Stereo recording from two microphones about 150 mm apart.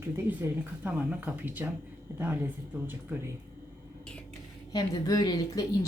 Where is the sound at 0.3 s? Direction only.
10° right (ahead or behind).